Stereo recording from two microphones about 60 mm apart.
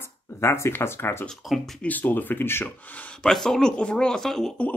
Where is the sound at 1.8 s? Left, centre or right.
Left.